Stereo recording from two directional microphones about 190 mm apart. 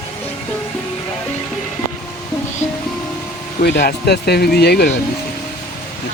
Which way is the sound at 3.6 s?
55° left (ahead or behind).